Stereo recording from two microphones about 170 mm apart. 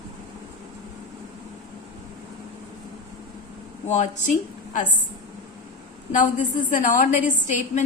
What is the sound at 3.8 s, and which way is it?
A woman's voice, 45° left (ahead or behind).